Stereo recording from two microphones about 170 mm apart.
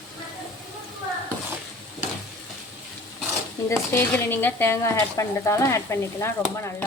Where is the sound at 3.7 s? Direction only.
15° left (ahead or behind).